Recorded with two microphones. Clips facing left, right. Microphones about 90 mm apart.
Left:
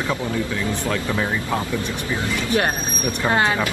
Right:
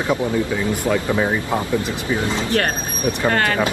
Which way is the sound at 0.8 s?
15° right (ahead or behind).